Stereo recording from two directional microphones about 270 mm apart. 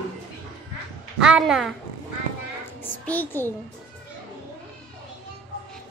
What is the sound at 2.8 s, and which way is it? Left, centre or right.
Speech, centre.